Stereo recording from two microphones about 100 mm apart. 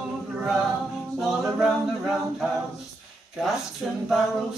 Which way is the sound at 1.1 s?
Centre (ahead or behind).